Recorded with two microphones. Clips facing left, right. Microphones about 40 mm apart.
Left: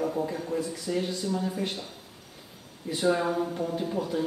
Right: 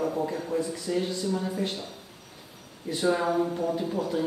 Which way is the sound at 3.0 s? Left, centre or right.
Right.